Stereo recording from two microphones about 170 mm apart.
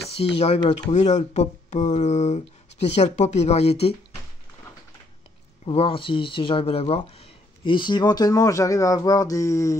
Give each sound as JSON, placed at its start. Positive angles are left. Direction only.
{"t": 0.4, "sound": "speech", "side_deg": 35}
{"t": 5.7, "sound": "speech", "side_deg": 30}